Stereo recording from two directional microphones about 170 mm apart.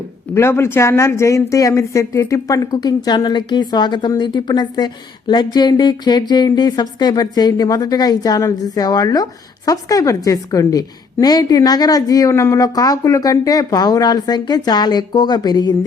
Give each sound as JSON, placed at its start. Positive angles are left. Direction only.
{"t": 0.3, "sound": "a woman's voice", "side_deg": 15}